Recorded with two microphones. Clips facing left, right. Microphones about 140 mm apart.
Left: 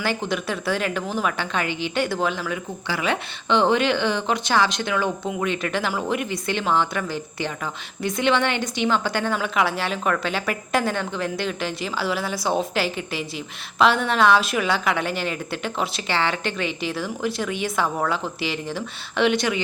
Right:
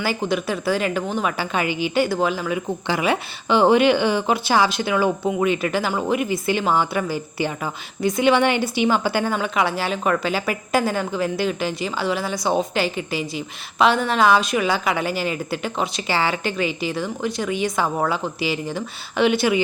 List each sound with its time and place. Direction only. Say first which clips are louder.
0.0 s a woman's voice: right 2 dB; 5° right (ahead or behind)
2.8 s speech: right 3 dB; 20° right (ahead or behind)
3.1 s a woman's voice: even; 10° right (ahead or behind)
17.8 s speech: right 2 dB; 25° right (ahead or behind)
18.1 s a woman's voice: right 2 dB; centre (ahead or behind)